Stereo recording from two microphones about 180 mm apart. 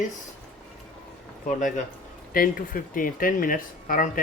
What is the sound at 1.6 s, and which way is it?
Speech, 45° left (ahead or behind).